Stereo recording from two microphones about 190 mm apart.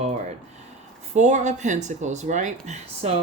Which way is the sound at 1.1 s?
40° right (ahead or behind).